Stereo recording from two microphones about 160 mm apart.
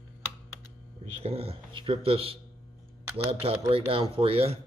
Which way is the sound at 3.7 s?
35° right (ahead or behind).